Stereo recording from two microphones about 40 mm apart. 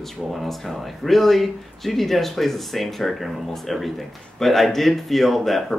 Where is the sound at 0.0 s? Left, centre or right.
Centre.